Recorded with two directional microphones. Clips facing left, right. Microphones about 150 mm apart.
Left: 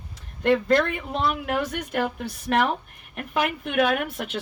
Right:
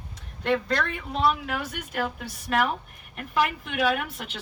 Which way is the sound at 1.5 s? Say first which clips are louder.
Left 6 dB; 65° left (ahead or behind).